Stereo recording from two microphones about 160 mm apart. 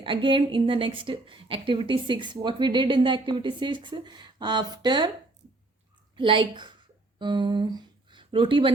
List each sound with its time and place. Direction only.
0.0 s a woman's voice: 30° right (ahead or behind)
6.1 s a woman's voice: 30° right (ahead or behind)